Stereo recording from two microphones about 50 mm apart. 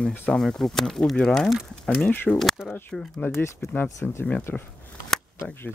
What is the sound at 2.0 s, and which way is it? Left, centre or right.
Speech, left.